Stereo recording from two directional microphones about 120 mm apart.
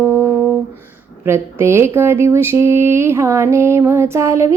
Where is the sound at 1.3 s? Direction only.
20° right (ahead or behind).